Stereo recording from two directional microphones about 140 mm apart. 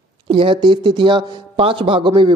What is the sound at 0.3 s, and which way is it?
Speech, 35° right (ahead or behind).